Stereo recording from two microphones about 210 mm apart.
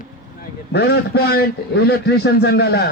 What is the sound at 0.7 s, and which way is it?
A man's voice, 50° left (ahead or behind).